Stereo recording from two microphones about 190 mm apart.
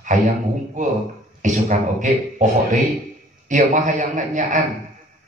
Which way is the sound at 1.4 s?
40° right (ahead or behind).